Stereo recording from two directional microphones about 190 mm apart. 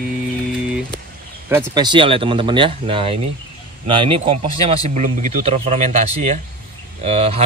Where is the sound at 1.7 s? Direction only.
25° right (ahead or behind).